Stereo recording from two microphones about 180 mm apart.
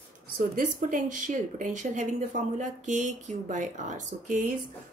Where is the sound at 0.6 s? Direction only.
45° right (ahead or behind).